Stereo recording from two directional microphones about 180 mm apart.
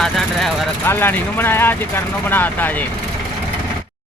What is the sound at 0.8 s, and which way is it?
Speech, 10° left (ahead or behind).